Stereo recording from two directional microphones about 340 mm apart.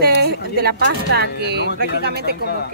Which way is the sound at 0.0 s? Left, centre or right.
Right.